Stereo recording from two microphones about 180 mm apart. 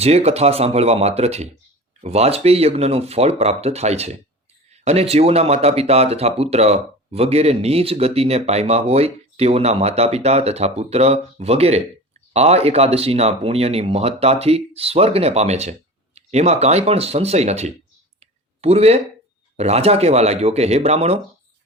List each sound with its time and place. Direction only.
0.0 s speech: 35° right (ahead or behind)